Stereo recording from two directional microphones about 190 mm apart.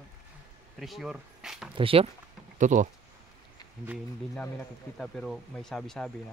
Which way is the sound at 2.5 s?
40° right (ahead or behind).